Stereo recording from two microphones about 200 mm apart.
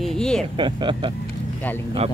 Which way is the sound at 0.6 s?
25° right (ahead or behind).